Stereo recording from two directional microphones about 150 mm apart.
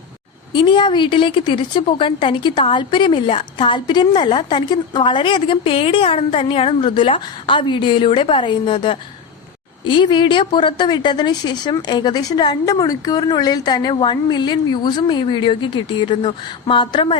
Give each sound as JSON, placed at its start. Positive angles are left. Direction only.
{"t": 0.5, "sound": "a woman's voice", "side_deg": 30}